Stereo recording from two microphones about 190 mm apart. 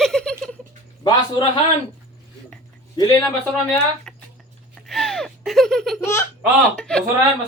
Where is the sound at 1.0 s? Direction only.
20° left (ahead or behind).